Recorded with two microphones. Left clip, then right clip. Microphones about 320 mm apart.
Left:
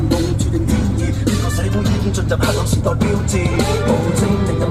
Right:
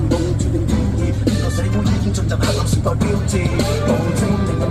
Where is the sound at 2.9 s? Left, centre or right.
Left.